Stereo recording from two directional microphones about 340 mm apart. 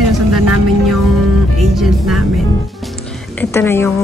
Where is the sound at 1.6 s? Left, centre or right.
Centre.